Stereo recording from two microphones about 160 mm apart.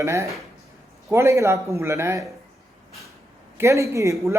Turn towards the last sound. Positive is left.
turn(degrees=-20)  # may be behind; listen again after turning